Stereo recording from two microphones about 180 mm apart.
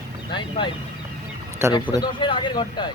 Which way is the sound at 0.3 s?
25° left (ahead or behind).